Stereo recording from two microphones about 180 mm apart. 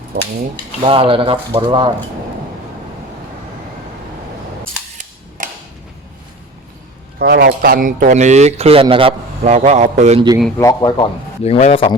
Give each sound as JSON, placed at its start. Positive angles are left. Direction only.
{"t": 0.8, "sound": "speech", "side_deg": -30}
{"t": 5.4, "sound": "a sound", "side_deg": -45}
{"t": 7.2, "sound": "speech", "side_deg": -55}
{"t": 10.6, "sound": "a man's voice", "side_deg": 20}